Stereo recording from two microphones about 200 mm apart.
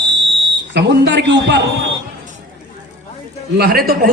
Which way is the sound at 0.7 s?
60° right (ahead or behind).